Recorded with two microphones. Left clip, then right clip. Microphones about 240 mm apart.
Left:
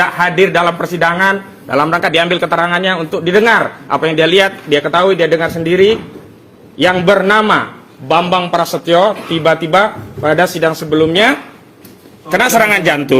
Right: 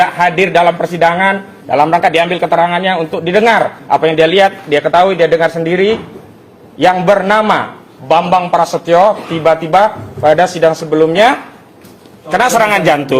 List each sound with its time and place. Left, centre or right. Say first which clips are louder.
0.0 s a man's voice: right 1 dB; left